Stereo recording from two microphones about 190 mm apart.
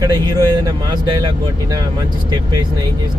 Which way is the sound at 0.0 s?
20° right (ahead or behind).